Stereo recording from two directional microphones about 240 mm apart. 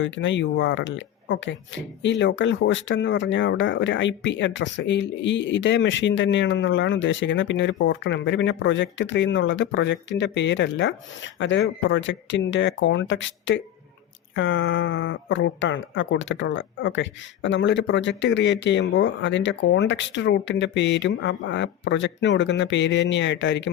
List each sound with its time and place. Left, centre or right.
0.0 s speech: left